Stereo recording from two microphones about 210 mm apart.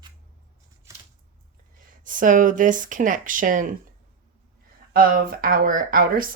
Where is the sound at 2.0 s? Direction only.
40° right (ahead or behind).